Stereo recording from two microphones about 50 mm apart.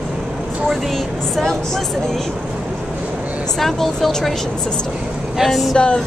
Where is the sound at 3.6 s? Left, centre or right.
Centre.